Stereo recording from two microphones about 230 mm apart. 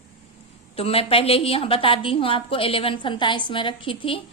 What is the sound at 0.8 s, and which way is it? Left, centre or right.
A woman's voice, left.